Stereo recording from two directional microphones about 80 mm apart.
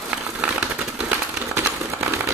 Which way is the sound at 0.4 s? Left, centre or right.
Centre.